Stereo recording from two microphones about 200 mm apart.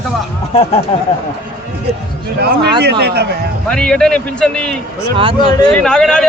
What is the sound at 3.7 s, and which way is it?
A man's voice, 5° left (ahead or behind).